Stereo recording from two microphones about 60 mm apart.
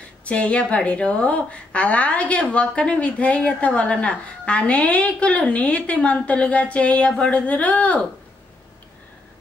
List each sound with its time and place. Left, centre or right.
0.2 s a woman's voice: left